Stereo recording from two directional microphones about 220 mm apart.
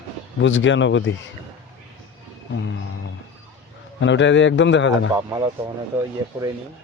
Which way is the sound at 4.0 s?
55° left (ahead or behind).